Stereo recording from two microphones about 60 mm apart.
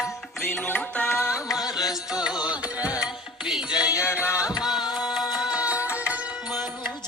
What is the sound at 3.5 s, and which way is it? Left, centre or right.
Music, centre.